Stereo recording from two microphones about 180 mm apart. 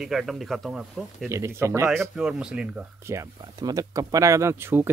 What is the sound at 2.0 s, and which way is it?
Speech, 5° right (ahead or behind).